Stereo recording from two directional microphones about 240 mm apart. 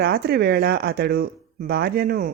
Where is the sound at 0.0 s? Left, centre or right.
Right.